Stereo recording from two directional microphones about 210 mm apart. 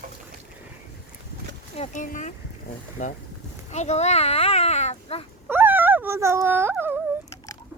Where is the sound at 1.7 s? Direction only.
35° left (ahead or behind).